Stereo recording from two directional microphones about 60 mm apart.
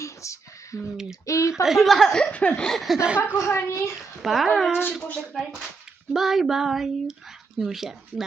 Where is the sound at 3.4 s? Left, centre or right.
Left.